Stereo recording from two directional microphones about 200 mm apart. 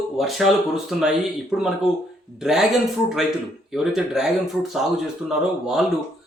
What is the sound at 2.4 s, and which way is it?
Speech, centre (ahead or behind).